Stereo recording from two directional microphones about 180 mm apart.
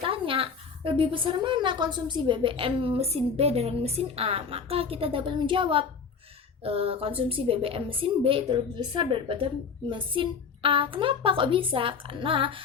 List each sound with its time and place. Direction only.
0.0 s a woman's voice: 30° right (ahead or behind)